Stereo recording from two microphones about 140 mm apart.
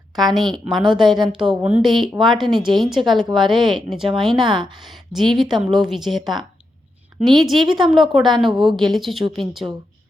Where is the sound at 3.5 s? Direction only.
35° right (ahead or behind).